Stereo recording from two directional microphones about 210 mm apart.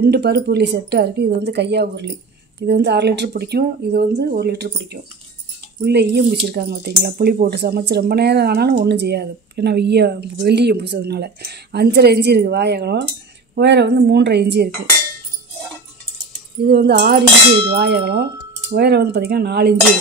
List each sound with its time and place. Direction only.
0.0 s speech: 50° right (ahead or behind)
16.6 s speech: 50° right (ahead or behind)
17.5 s a sound: 25° right (ahead or behind)
17.7 s speech: 50° right (ahead or behind)